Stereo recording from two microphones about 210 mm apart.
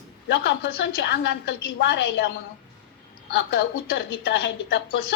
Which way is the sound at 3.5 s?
55° left (ahead or behind).